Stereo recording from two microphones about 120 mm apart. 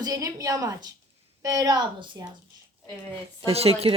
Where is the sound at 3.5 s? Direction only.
55° right (ahead or behind).